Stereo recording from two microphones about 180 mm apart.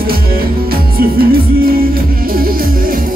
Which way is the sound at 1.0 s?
55° right (ahead or behind).